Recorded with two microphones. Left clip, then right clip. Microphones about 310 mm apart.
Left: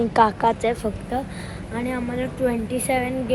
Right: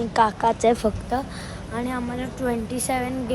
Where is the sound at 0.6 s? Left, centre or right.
Right.